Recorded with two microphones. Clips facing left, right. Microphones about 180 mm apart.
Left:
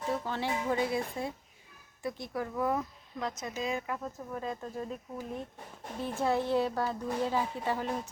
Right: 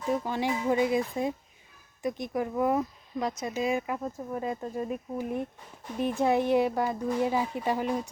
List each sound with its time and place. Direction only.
0.1 s speech: 15° right (ahead or behind)